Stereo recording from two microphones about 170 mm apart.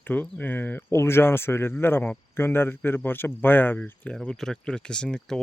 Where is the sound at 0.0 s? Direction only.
10° left (ahead or behind).